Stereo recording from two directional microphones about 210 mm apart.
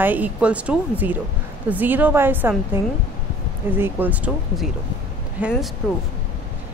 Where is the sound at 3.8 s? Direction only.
10° right (ahead or behind).